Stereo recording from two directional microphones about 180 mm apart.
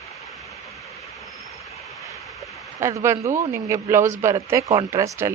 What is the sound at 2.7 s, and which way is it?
Speech, 15° right (ahead or behind).